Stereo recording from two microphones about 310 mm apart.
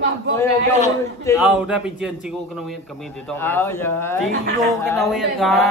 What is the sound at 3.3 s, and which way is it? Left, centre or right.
A man's voice, centre.